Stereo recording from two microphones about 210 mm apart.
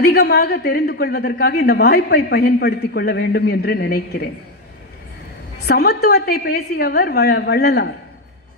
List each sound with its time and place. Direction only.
0.0 s a woman's voice: 50° left (ahead or behind)
5.7 s a woman's voice: 50° left (ahead or behind)